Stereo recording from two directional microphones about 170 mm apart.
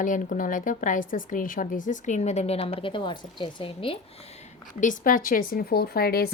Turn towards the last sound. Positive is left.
turn(degrees=65)  # may be behind; listen again after turning